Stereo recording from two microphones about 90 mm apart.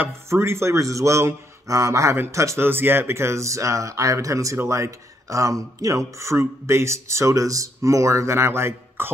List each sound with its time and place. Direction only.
0.0 s speech: 30° right (ahead or behind)